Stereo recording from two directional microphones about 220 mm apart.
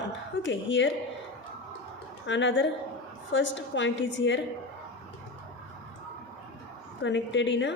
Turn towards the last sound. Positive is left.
turn(degrees=55)  # may be behind; listen again after turning